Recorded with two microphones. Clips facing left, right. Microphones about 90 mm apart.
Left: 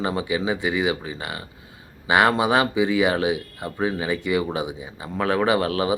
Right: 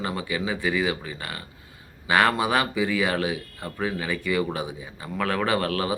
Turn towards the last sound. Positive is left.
turn(degrees=20)  # may be behind; listen again after turning